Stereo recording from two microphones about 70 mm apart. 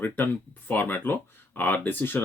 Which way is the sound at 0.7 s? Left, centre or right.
Left.